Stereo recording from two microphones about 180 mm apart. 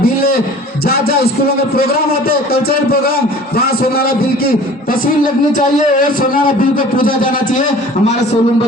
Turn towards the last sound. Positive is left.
turn(degrees=50)  # may be behind; listen again after turning